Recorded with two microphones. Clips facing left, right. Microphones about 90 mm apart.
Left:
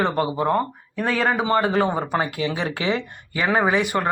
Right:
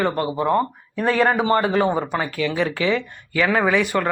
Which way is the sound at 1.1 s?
40° right (ahead or behind).